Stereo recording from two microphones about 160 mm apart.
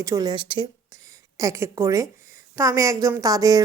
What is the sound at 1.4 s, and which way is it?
Speech, 20° right (ahead or behind).